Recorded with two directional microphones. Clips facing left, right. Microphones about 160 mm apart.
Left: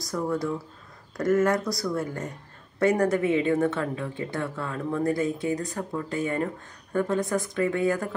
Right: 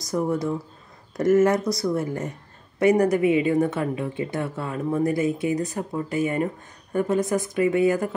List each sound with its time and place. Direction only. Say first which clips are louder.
0.1 s a woman's voice: right 3 dB; 20° right (ahead or behind)